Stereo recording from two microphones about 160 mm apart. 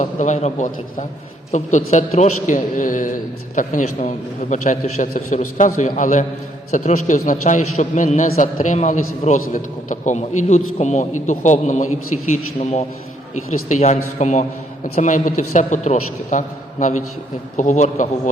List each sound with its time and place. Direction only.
0.0 s a man's voice: 50° left (ahead or behind)
13.5 s a man's voice: 50° left (ahead or behind)
17.6 s a man's voice: 50° left (ahead or behind)